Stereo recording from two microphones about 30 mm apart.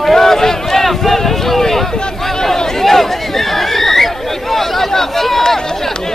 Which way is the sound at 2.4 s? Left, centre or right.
Centre.